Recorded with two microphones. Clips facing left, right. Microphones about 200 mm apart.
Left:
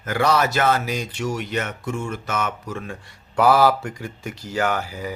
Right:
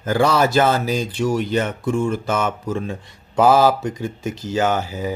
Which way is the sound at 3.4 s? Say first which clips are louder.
Right 2 dB; 20° right (ahead or behind).